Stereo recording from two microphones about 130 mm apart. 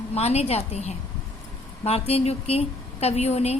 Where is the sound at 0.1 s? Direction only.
55° left (ahead or behind).